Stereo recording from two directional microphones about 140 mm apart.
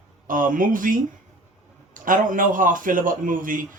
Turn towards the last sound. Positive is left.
turn(degrees=-75)  # may be behind; listen again after turning